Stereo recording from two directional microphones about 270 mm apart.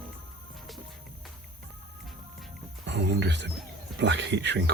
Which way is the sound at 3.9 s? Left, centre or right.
Right.